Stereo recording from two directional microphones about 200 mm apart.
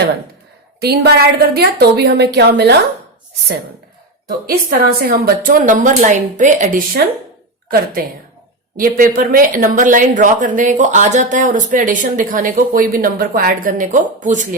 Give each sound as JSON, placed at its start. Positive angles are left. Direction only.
{"t": 0.8, "sound": "a woman's voice", "side_deg": -50}
{"t": 4.3, "sound": "a woman's voice", "side_deg": -50}
{"t": 8.7, "sound": "speech", "side_deg": -45}